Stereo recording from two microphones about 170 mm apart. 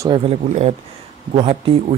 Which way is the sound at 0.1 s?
35° right (ahead or behind).